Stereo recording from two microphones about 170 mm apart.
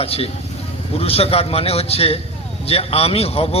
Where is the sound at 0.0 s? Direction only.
35° left (ahead or behind).